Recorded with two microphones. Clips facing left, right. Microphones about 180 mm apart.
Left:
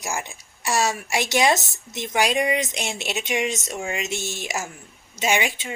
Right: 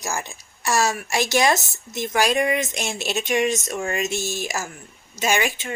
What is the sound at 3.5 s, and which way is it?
Speech, 55° right (ahead or behind).